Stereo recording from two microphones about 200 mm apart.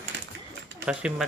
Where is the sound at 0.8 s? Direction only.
5° right (ahead or behind).